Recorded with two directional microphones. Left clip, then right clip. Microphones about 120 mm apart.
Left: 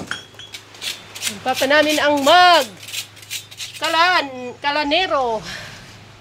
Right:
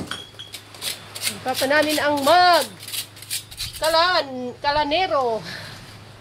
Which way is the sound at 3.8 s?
30° left (ahead or behind).